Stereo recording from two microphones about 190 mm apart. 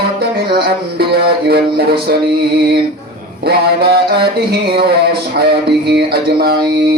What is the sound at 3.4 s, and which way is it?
Music, 55° right (ahead or behind).